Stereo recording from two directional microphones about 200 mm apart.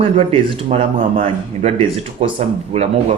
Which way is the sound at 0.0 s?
30° right (ahead or behind).